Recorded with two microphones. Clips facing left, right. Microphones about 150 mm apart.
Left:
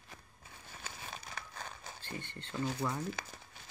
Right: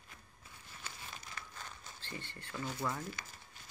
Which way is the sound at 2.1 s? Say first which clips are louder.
Left 5 dB; 20° left (ahead or behind).